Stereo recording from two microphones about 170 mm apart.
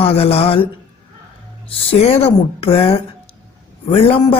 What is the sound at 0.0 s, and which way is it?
Speech, 35° left (ahead or behind).